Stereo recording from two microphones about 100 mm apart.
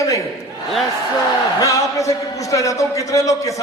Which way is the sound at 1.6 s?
35° left (ahead or behind).